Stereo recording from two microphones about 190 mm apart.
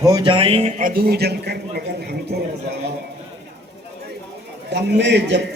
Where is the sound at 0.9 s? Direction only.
55° right (ahead or behind).